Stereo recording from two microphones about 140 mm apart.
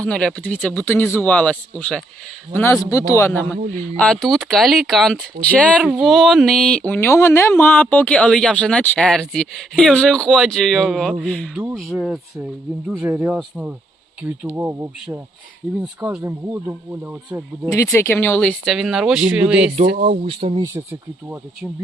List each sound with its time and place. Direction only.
0.0 s speech: 5° left (ahead or behind); by 14.8 s 15° right (ahead or behind)
15.6 s speech: centre (ahead or behind)
16.0 s speech: 15° right (ahead or behind)
17.9 s speech: 15° left (ahead or behind)
18.6 s speech: centre (ahead or behind)
19.7 s speech: 60° right (ahead or behind)
20.2 s speech: 40° right (ahead or behind)
20.7 s speech: 15° right (ahead or behind)